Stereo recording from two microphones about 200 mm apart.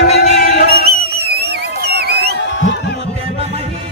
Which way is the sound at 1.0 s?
50° right (ahead or behind).